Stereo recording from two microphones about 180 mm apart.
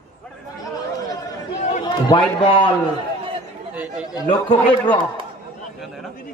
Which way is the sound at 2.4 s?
25° left (ahead or behind).